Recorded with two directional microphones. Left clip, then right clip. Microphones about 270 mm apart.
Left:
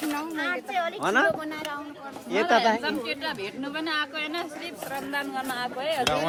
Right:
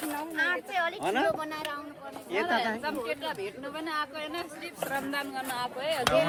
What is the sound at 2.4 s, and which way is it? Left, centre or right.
Speech, left.